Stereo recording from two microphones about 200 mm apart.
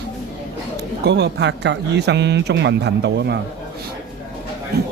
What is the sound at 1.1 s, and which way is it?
A man's voice, 60° right (ahead or behind).